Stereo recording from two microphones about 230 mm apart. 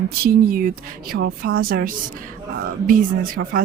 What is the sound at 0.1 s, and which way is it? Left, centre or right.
A woman's voice, right.